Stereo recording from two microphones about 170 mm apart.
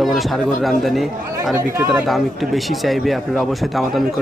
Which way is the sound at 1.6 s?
15° right (ahead or behind).